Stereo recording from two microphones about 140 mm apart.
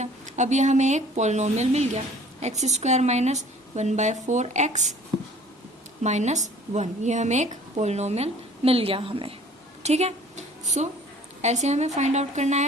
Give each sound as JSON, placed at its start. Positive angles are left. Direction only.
{"t": 0.0, "sound": "a woman's voice", "side_deg": -60}
{"t": 6.0, "sound": "a woman's voice", "side_deg": -55}
{"t": 9.8, "sound": "a sound", "side_deg": -50}
{"t": 11.4, "sound": "a woman's voice", "side_deg": -55}